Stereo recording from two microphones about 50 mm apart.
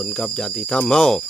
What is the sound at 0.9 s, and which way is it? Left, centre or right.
Speech, centre.